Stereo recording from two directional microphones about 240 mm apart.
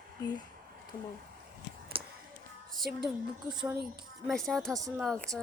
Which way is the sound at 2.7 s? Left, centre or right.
Centre.